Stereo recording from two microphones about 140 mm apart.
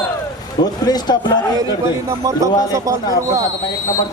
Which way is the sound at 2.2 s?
25° right (ahead or behind).